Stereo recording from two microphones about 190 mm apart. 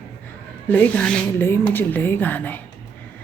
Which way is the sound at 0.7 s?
10° left (ahead or behind).